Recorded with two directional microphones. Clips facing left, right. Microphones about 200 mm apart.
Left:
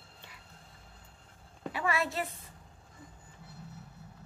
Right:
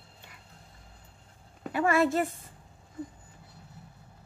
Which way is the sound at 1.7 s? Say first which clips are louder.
Right 8 dB; 50° right (ahead or behind).